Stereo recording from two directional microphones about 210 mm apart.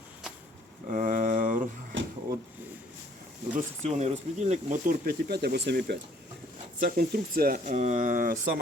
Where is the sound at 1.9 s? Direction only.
65° right (ahead or behind).